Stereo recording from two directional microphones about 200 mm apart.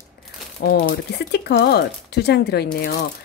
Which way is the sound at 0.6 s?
55° left (ahead or behind).